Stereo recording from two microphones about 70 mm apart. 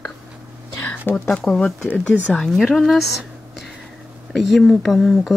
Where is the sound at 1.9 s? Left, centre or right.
Left.